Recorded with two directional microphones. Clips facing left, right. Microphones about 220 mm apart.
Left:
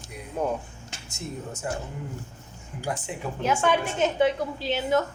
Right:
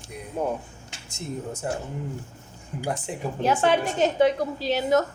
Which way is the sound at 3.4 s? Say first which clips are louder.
Right 2 dB; 35° right (ahead or behind).